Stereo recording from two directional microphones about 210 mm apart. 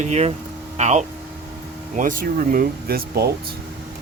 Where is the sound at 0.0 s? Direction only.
30° right (ahead or behind); by 3.2 s 45° right (ahead or behind).